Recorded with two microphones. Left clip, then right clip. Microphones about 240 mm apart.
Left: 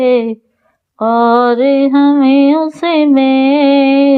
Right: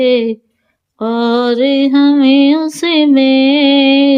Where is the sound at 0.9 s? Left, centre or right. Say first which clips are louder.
Left 5 dB; centre.